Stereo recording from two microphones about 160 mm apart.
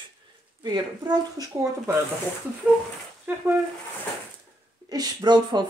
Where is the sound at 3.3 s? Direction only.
10° right (ahead or behind).